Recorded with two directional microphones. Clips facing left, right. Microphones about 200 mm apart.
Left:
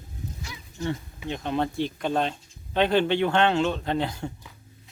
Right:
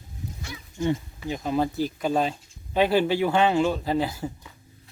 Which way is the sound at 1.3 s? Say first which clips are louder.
Right 2 dB; 5° right (ahead or behind).